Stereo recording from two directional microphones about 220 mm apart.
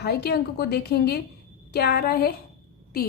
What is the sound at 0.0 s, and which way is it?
A woman's voice, 50° left (ahead or behind).